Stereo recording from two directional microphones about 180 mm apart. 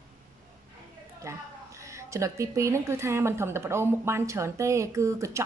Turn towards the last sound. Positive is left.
turn(degrees=-15)  # may be behind; listen again after turning